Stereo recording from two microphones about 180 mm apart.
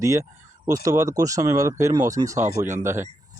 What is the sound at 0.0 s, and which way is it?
Speech, 15° right (ahead or behind).